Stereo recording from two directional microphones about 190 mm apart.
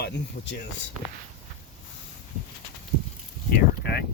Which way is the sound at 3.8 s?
55° left (ahead or behind).